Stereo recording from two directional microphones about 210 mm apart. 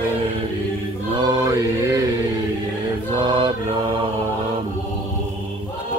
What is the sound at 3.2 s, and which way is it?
Music, 25° right (ahead or behind).